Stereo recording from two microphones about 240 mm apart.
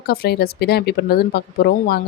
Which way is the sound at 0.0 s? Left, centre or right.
Left.